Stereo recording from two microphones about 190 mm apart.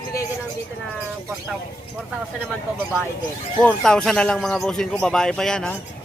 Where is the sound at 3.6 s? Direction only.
5° left (ahead or behind).